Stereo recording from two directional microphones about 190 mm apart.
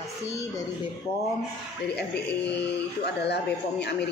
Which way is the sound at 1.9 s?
60° left (ahead or behind).